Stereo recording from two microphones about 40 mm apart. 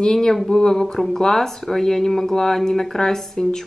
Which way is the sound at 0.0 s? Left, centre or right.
Centre.